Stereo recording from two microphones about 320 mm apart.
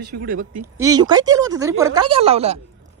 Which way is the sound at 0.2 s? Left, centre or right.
Right.